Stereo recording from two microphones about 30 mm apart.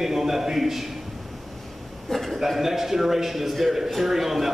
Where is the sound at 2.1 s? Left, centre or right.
Centre.